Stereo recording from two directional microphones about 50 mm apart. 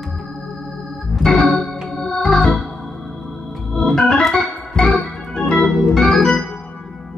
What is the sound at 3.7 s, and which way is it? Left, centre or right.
Organ, centre.